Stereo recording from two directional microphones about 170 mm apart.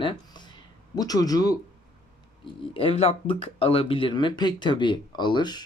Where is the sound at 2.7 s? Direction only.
35° left (ahead or behind).